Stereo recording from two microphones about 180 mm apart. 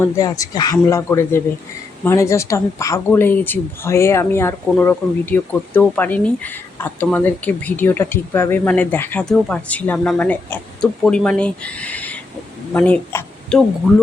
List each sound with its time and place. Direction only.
0.0 s speech: 20° left (ahead or behind)